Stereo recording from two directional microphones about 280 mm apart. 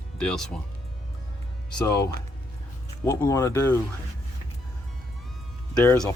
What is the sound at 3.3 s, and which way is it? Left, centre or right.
Speech, centre.